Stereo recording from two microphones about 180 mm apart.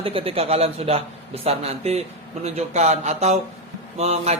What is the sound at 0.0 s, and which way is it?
A man's voice, 30° right (ahead or behind).